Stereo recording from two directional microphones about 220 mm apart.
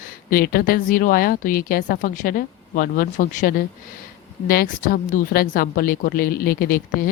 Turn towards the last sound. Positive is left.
turn(degrees=40)  # may be behind; listen again after turning